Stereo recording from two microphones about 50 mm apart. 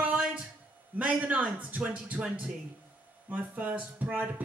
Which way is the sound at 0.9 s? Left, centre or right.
Right.